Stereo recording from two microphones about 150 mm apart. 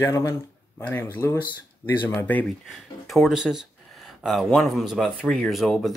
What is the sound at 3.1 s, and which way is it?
Speech, centre (ahead or behind).